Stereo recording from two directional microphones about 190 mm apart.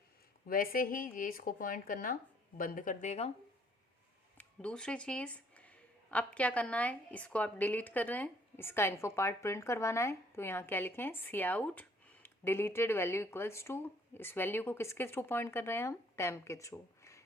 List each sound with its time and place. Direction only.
0.4 s speech: 50° left (ahead or behind)
4.4 s speech: 5° left (ahead or behind)